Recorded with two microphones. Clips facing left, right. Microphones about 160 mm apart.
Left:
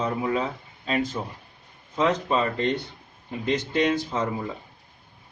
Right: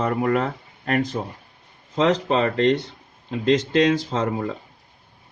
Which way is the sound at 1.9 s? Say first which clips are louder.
Right 4 dB; 80° right.